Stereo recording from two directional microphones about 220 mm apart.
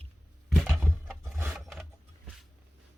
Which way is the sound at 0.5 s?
Centre (ahead or behind).